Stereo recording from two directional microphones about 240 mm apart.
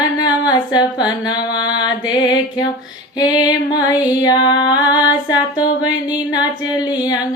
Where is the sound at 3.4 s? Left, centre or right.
Centre.